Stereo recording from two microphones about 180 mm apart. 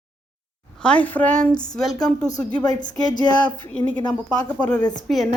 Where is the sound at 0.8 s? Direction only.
5° left (ahead or behind).